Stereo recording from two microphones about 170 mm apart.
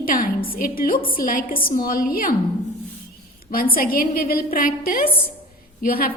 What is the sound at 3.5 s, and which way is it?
A woman's voice, 60° left (ahead or behind).